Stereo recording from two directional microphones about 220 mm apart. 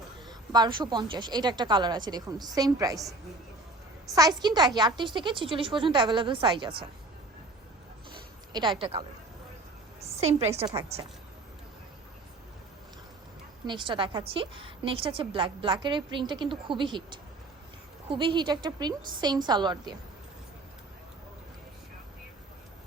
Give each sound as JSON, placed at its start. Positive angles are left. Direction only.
{"t": 0.3, "sound": "a woman's voice", "side_deg": -20}
{"t": 8.1, "sound": "a sound", "side_deg": -20}
{"t": 10.1, "sound": "a woman's voice", "side_deg": -30}
{"t": 10.8, "sound": "a woman's voice", "side_deg": -15}
{"t": 13.7, "sound": "a woman's voice", "side_deg": -20}